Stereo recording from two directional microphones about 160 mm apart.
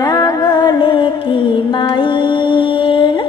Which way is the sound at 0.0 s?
20° left (ahead or behind).